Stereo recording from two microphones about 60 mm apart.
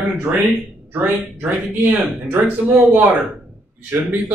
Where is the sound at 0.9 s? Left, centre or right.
Right.